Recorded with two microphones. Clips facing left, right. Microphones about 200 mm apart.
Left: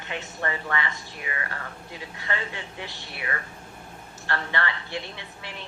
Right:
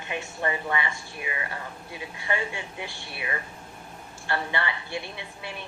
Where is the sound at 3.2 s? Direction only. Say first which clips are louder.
Even; 20° right (ahead or behind).